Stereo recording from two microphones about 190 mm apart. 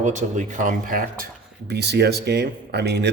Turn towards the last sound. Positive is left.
turn(degrees=-60)  # may be behind; listen again after turning